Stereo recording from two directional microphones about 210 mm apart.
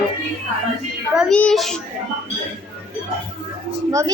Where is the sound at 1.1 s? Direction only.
5° left (ahead or behind).